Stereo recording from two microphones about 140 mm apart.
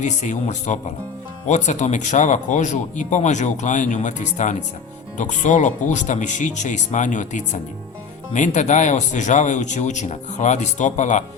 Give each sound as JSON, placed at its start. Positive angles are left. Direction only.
{"t": 0.0, "sound": "speech", "side_deg": 60}